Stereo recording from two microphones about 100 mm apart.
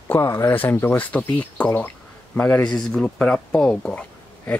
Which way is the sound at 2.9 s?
10° left (ahead or behind).